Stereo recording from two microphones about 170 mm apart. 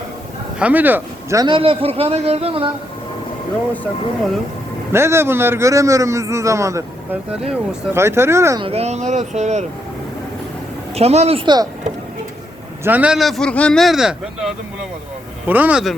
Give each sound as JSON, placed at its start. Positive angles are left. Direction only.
{"t": 0.6, "sound": "speech", "side_deg": -10}
{"t": 1.5, "sound": "speech", "side_deg": -30}
{"t": 4.9, "sound": "a man's voice", "side_deg": -15}
{"t": 8.6, "sound": "speech", "side_deg": -40}
{"t": 10.9, "sound": "speech", "side_deg": -40}
{"t": 12.8, "sound": "a man's voice", "side_deg": -10}